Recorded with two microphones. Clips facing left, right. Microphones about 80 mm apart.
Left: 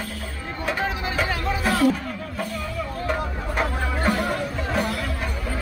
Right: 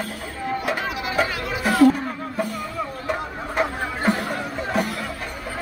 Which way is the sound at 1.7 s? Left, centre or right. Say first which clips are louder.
Right 7 dB; right.